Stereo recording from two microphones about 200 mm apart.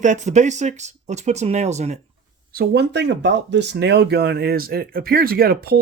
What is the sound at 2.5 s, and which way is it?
Speech, 55° right (ahead or behind).